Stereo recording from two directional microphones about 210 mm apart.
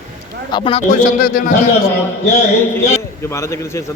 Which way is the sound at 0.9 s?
45° left (ahead or behind).